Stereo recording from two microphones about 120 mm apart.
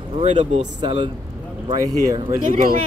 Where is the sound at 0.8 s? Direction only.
40° right (ahead or behind).